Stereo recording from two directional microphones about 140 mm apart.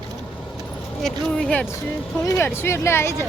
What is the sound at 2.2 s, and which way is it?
Speech, 20° left (ahead or behind).